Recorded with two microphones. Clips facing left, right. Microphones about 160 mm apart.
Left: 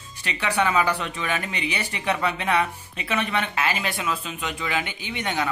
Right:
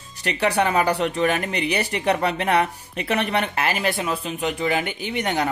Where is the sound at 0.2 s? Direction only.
40° right (ahead or behind).